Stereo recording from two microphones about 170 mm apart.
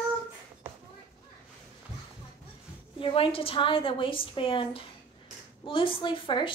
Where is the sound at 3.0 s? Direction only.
30° left (ahead or behind).